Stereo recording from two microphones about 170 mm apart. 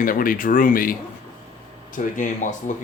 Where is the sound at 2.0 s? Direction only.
50° left (ahead or behind).